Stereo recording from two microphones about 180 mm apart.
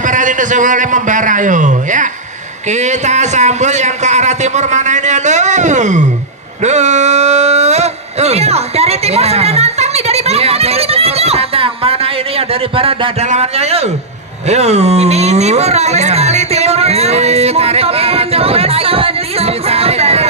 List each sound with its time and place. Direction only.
0.0 s a man's voice: 45° right (ahead or behind)
6.6 s a sound: 40° right (ahead or behind)
14.5 s speech: 35° right (ahead or behind)